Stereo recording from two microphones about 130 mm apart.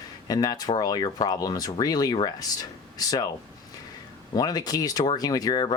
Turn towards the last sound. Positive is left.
turn(degrees=30)  # may be behind; listen again after turning